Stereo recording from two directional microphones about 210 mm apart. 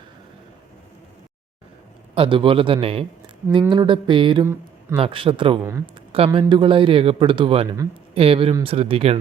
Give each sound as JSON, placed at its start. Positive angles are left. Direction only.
{"t": 2.1, "sound": "speech", "side_deg": -25}
{"t": 5.6, "sound": "speech", "side_deg": -15}
{"t": 6.1, "sound": "speech", "side_deg": -25}